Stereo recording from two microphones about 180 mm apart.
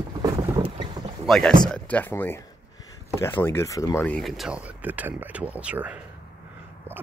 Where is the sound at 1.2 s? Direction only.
5° left (ahead or behind).